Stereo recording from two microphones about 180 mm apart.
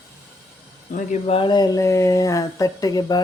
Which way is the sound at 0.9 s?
45° left (ahead or behind).